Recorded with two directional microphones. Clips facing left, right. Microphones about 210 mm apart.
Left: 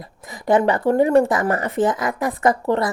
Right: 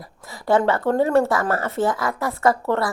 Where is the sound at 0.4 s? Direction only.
15° left (ahead or behind).